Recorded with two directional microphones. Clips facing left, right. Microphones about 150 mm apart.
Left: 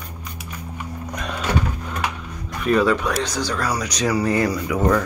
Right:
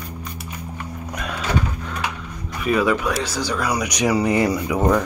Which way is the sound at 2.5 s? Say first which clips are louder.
Left 1 dB; 5° right (ahead or behind).